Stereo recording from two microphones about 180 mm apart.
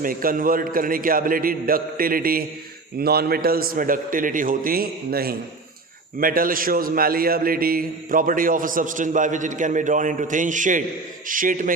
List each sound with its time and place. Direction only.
0.0 s a man's voice: 50° right (ahead or behind)